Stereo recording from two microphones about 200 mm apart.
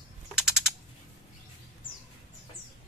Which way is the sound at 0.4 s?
5° right (ahead or behind).